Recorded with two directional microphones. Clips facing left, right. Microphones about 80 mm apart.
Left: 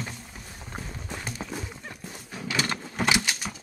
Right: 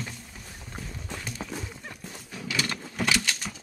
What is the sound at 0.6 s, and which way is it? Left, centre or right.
Clip-clop, left.